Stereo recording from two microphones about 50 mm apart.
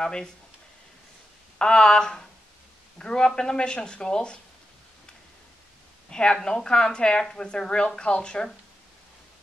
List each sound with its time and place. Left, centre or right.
0.0 s speech: centre
1.6 s speech: centre
6.0 s speech: centre